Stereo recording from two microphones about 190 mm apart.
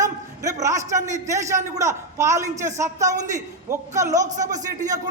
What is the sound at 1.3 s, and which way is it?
A man's voice, 15° right (ahead or behind).